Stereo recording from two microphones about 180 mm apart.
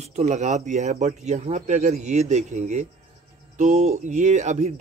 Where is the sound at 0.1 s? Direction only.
40° right (ahead or behind).